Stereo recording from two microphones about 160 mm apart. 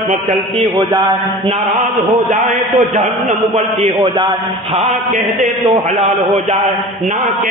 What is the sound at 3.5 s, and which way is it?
Speech, 40° right (ahead or behind).